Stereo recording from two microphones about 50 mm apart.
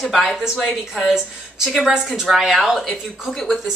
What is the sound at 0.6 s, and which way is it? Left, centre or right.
Speech, centre.